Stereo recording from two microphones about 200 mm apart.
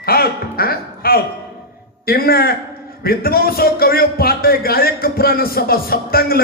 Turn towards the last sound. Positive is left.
turn(degrees=50)  # may be behind; listen again after turning